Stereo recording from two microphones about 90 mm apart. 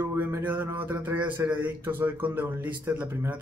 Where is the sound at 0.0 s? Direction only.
25° right (ahead or behind).